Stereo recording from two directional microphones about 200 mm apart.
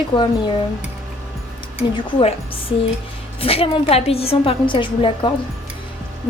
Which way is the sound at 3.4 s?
30° left (ahead or behind).